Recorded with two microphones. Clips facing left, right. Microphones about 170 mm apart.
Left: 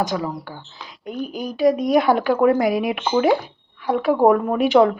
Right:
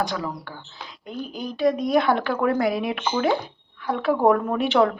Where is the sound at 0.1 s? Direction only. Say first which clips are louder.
Left 4 dB; 15° left (ahead or behind).